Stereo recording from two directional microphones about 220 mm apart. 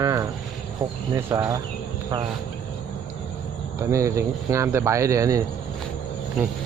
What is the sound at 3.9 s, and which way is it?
Speech, 15° right (ahead or behind).